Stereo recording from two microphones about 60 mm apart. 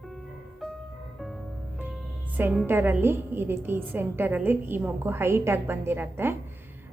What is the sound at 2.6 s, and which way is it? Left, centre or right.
A woman's voice, right.